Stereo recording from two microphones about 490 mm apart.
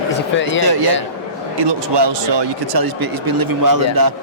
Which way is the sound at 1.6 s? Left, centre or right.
Right.